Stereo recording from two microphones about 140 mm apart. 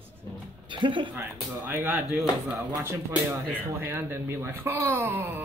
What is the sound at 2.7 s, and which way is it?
Speech, 20° right (ahead or behind).